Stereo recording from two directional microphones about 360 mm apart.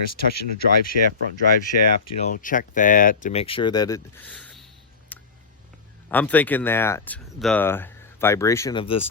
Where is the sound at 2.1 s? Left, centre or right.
Left; by 4.7 s centre.